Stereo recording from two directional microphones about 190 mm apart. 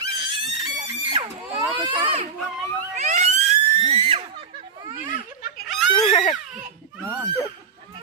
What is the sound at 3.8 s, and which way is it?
Screaming, 30° right (ahead or behind).